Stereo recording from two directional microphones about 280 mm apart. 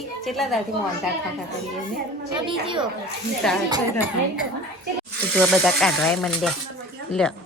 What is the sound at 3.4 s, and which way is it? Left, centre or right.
Speech, centre.